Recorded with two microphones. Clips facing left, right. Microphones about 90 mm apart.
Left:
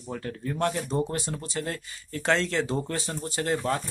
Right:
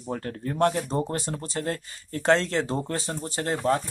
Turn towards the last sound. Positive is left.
turn(degrees=-30)  # may be behind; listen again after turning